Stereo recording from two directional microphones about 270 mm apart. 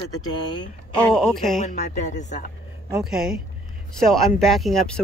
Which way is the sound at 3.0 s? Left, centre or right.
Centre.